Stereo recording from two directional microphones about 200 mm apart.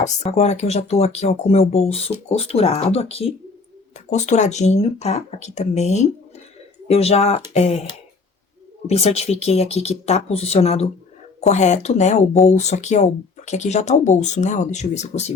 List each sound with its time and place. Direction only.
0.0 s speech: 35° left (ahead or behind)